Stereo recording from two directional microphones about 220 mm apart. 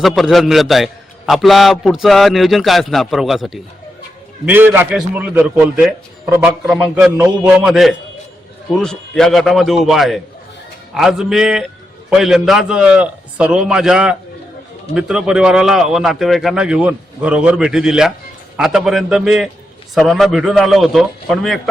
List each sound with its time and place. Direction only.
0.0 s a man's voice: centre (ahead or behind)